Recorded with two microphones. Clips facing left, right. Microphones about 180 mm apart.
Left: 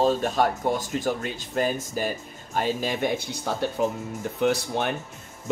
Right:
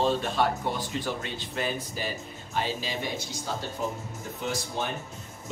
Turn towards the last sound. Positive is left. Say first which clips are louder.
# left 8 dB
turn(degrees=65)  # may be behind; listen again after turning